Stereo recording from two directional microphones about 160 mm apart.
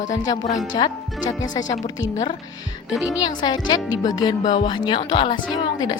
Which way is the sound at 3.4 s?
25° left (ahead or behind).